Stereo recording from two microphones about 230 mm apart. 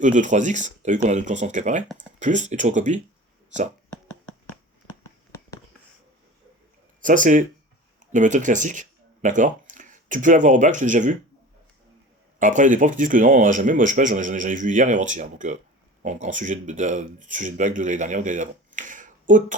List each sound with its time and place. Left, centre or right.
0.0 s speech: right
3.8 s a sound: centre
7.0 s speech: right
12.4 s speech: right